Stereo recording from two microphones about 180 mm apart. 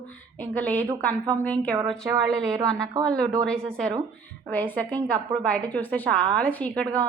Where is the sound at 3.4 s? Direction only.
5° left (ahead or behind).